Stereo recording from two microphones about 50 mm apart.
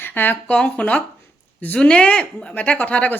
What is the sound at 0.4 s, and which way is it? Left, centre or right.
A woman's voice, left.